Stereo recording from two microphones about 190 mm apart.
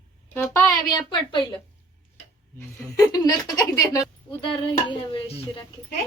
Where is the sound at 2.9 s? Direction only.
20° left (ahead or behind).